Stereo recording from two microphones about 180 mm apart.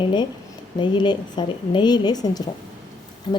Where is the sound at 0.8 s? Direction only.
25° left (ahead or behind).